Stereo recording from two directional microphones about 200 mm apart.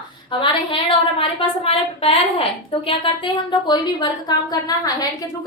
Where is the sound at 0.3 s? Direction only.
25° left (ahead or behind).